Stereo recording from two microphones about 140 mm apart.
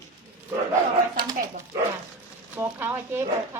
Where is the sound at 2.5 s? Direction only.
15° right (ahead or behind).